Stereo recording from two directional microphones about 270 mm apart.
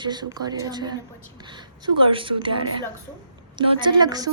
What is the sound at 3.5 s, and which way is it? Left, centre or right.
Speech, centre.